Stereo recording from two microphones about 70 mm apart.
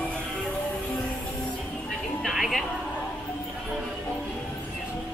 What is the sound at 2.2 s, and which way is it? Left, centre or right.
Music, centre.